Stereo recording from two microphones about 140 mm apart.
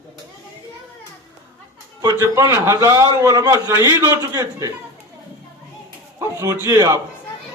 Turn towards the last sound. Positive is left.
turn(degrees=-25)  # may be behind; listen again after turning